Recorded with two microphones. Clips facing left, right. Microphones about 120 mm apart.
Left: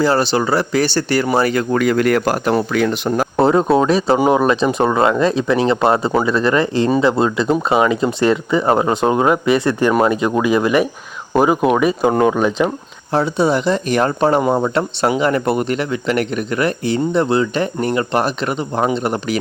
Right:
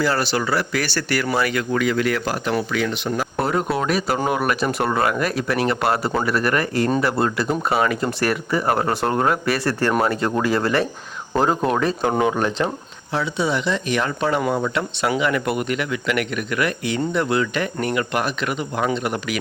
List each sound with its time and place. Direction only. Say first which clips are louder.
0.0 s speech: left 6 dB; 25° left (ahead or behind); by 3.2 s 45° left (ahead or behind)
3.3 s speech: left 10 dB; 25° left (ahead or behind)
13.1 s speech: left 6 dB; 40° left (ahead or behind)